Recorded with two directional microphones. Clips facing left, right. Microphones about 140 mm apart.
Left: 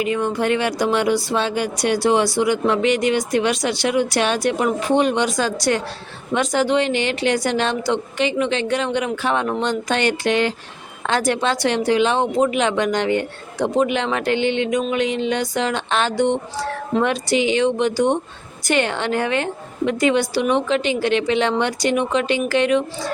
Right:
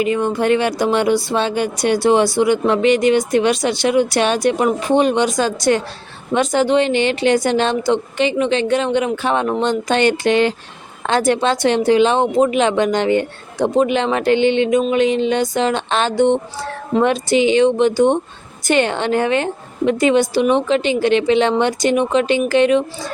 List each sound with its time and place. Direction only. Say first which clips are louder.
0.0 s speech: right 3 dB; 30° right (ahead or behind)